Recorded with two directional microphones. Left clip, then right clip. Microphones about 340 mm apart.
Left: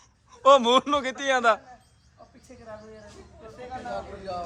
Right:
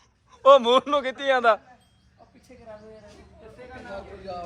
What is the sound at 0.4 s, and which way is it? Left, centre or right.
A man's voice, centre.